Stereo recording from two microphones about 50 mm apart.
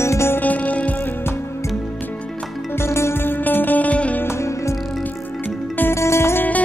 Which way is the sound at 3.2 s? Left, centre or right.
Left.